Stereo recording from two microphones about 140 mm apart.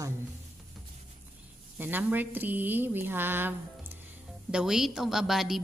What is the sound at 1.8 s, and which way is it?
A woman's voice, 15° right (ahead or behind).